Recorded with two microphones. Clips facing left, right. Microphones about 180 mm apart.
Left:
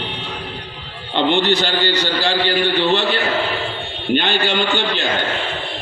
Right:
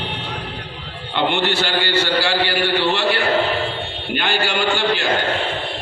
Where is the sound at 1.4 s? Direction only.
20° left (ahead or behind).